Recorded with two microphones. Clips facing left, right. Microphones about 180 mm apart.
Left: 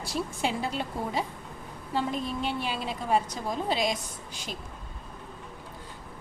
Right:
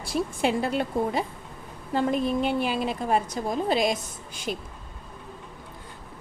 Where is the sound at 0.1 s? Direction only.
60° right (ahead or behind).